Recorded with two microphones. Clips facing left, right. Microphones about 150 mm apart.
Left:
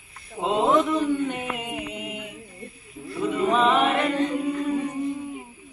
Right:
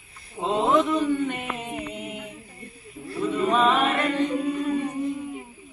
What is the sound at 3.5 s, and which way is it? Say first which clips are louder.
Chant: left 1 dB; 10° left (ahead or behind).